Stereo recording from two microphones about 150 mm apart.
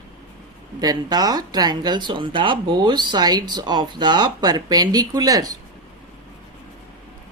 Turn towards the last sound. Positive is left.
turn(degrees=-25)  # may be behind; listen again after turning